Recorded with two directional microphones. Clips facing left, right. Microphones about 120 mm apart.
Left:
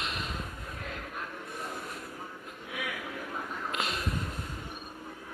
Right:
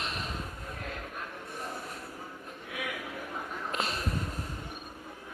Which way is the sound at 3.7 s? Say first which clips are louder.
Right 1 dB; 35° right (ahead or behind).